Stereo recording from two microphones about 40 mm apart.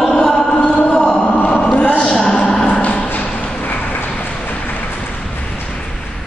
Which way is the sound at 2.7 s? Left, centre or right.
Left.